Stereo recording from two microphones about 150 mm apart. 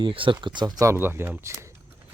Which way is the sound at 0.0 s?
35° right (ahead or behind).